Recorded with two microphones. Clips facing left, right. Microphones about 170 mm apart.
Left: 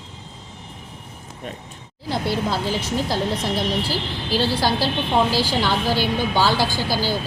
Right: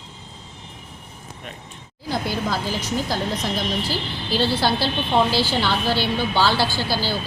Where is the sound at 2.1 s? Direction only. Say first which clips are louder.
Left 1 dB; 25° left (ahead or behind).